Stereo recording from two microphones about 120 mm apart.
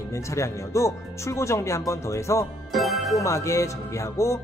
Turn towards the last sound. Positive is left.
turn(degrees=25)  # may be behind; listen again after turning